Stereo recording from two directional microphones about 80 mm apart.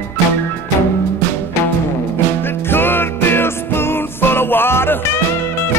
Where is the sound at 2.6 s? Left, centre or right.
Left.